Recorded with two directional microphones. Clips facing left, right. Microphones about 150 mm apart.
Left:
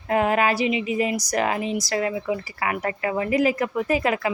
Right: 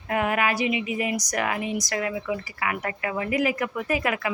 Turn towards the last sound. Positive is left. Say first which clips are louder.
# left 4 dB
turn(degrees=30)  # may be behind; listen again after turning